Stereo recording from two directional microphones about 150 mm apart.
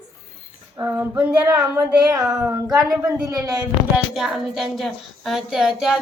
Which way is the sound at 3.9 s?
5° right (ahead or behind).